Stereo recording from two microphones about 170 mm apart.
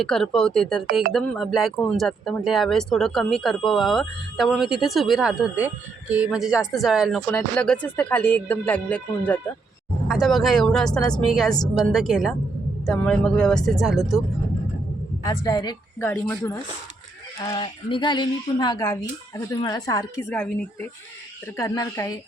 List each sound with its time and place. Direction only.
0.0 s speech: centre (ahead or behind)
15.2 s speech: 20° left (ahead or behind)
17.6 s speech: 30° left (ahead or behind)
20.3 s speech: 10° left (ahead or behind)